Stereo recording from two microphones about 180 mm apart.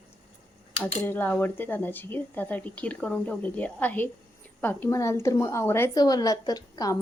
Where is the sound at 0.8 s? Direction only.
10° left (ahead or behind).